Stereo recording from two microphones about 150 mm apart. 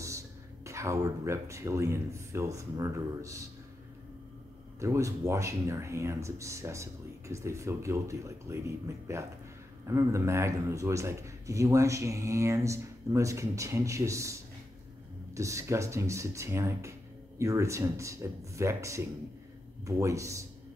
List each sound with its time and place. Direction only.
0.7 s speech: 20° right (ahead or behind)
4.7 s speech: 20° right (ahead or behind)
15.3 s speech: 20° right (ahead or behind)